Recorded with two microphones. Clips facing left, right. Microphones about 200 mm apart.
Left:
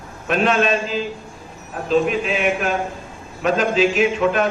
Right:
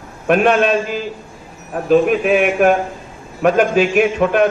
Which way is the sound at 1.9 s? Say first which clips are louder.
Right 6 dB; 55° right (ahead or behind).